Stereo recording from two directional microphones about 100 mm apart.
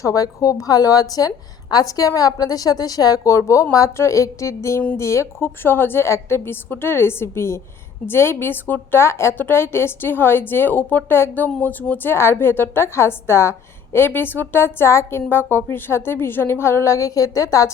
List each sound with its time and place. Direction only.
0.0 s a woman's voice: 35° left (ahead or behind)